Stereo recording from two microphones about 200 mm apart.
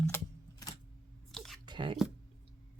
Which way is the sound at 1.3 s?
Centre (ahead or behind).